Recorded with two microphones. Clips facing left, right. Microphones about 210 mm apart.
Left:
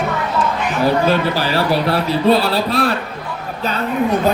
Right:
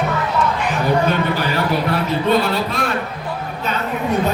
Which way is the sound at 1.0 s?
35° left (ahead or behind).